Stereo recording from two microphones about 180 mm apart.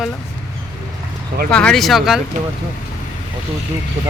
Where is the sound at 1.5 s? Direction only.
5° left (ahead or behind).